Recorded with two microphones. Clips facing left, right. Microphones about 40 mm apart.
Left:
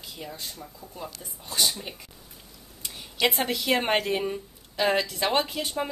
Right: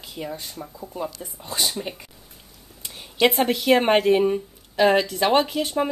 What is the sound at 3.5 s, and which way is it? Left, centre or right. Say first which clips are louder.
Speech: right 7 dB; centre.